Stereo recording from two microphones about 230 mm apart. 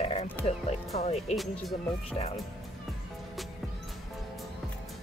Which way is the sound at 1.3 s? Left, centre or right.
Centre.